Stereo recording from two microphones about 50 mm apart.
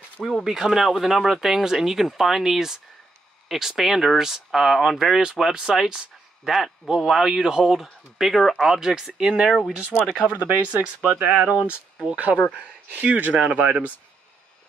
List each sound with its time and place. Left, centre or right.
0.2 s speech: centre
9.9 s speech: right